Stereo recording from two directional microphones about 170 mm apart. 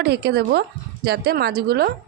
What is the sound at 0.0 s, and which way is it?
A woman's voice, 70° right (ahead or behind).